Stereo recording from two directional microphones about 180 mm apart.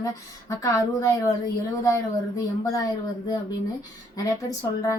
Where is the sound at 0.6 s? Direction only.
20° left (ahead or behind).